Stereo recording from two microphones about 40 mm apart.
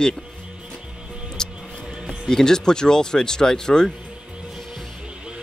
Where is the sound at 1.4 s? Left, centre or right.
Centre.